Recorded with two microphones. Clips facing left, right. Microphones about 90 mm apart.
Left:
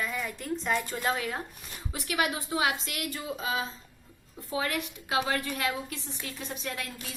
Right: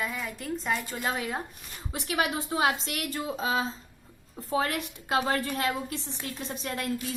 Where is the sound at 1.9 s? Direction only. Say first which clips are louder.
Right 1 dB; 35° right (ahead or behind).